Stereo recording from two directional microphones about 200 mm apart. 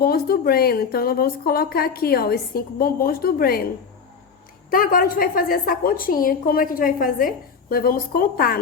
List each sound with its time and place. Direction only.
0.0 s a woman's voice: 50° left (ahead or behind)
4.7 s a woman's voice: 45° left (ahead or behind)